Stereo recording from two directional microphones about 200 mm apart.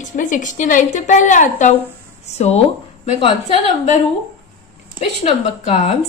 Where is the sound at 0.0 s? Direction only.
40° left (ahead or behind).